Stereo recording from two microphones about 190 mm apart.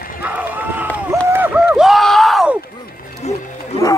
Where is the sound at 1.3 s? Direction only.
10° right (ahead or behind).